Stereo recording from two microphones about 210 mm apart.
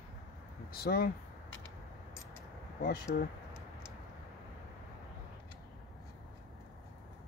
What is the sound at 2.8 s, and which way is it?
Speech, 45° left (ahead or behind).